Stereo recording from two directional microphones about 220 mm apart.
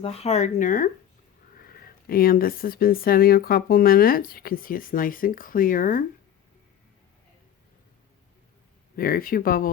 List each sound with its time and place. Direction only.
0.0 s speech: 25° left (ahead or behind)
9.0 s speech: 40° left (ahead or behind)